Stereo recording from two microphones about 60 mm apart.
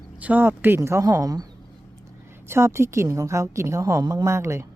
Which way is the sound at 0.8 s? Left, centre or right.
Right.